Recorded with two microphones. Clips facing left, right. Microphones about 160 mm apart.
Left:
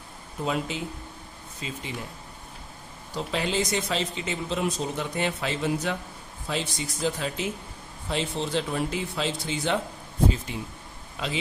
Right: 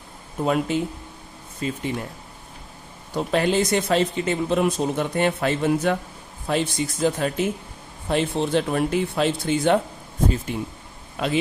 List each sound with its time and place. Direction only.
0.4 s speech: 55° right (ahead or behind)
3.2 s speech: 55° right (ahead or behind)